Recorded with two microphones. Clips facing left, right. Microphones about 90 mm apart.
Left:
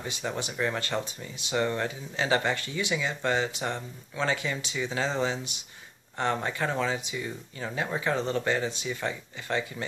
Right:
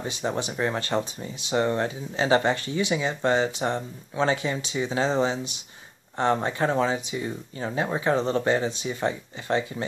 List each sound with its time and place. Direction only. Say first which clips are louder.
0.0 s speech: right 5 dB; 25° right (ahead or behind)